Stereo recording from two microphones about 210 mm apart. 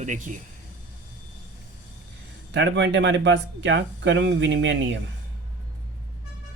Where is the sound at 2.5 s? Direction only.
60° right (ahead or behind).